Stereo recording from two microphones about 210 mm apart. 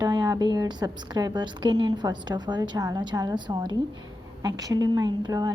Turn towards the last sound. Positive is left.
turn(degrees=-15)  # may be behind; listen again after turning